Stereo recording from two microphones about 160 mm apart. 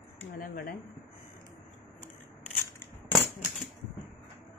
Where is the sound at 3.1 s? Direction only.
5° right (ahead or behind).